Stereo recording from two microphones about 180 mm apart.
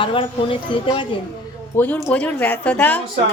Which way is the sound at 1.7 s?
10° left (ahead or behind).